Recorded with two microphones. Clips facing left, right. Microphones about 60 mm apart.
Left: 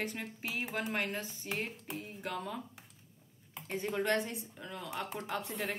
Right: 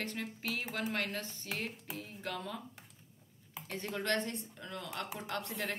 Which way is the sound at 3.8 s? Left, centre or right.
Centre.